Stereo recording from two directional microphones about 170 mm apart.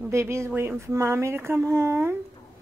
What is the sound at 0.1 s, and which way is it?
Speech, 15° right (ahead or behind).